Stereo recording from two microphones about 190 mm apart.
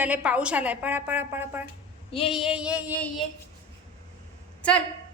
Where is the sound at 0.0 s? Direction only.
5° right (ahead or behind).